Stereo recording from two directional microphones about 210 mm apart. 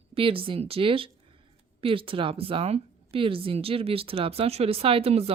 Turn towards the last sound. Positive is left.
turn(degrees=-30)  # may be behind; listen again after turning